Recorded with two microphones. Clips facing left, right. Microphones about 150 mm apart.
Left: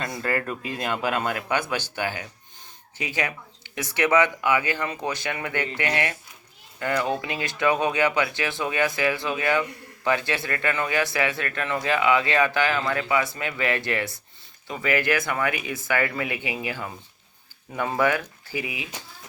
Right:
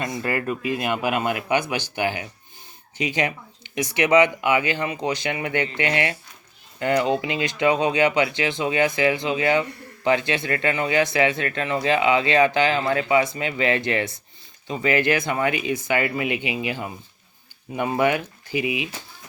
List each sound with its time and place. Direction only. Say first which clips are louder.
0.0 s a man's voice: right 2 dB; 15° right (ahead or behind)